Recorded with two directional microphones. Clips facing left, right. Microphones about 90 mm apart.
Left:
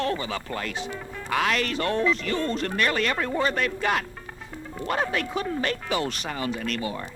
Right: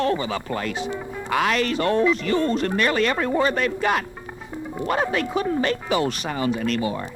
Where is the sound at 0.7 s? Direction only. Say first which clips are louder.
Right 5 dB; 15° right (ahead or behind).